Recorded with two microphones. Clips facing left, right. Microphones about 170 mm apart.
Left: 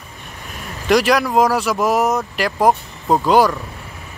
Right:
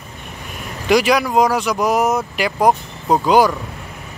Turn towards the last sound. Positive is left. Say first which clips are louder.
# even
turn(degrees=0)  # may be behind; listen again after turning